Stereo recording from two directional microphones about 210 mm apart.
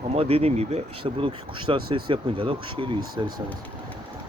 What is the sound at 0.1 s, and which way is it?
Speech, 30° right (ahead or behind).